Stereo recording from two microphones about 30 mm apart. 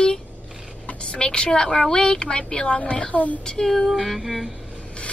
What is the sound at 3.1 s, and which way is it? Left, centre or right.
Speech, left.